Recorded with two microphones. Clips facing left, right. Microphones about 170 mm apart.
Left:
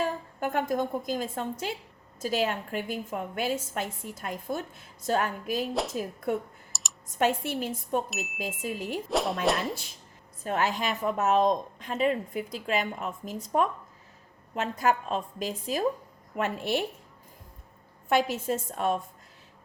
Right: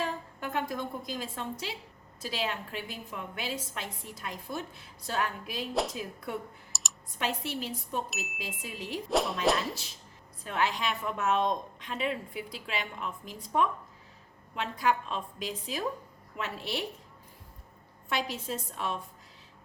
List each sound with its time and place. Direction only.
0.0 s a woman's voice: 45° left (ahead or behind)
5.7 s speech: centre (ahead or behind)
6.0 s a woman's voice: 50° left (ahead or behind)
6.7 s computer keyboard: centre (ahead or behind)
7.2 s a woman's voice: 50° left (ahead or behind)
8.1 s speech: centre (ahead or behind)
8.4 s a woman's voice: 45° left (ahead or behind)
9.0 s speech: centre (ahead or behind)
10.4 s a woman's voice: 45° left (ahead or behind)
18.1 s a woman's voice: 50° left (ahead or behind)